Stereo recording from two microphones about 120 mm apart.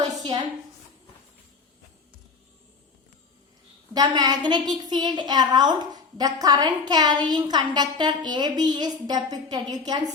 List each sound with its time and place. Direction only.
3.9 s a woman's voice: 35° right (ahead or behind)